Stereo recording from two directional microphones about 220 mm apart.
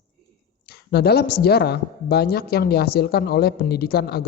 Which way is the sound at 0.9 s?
45° left (ahead or behind).